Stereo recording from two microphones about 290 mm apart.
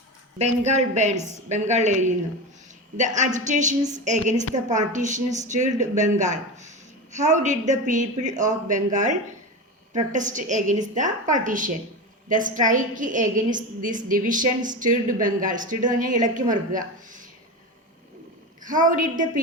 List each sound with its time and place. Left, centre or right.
0.3 s a woman's voice: right
18.6 s a woman's voice: right